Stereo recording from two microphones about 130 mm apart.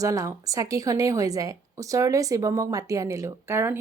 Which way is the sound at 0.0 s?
25° right (ahead or behind).